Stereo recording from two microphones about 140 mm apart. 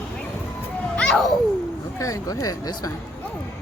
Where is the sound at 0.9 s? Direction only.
5° left (ahead or behind).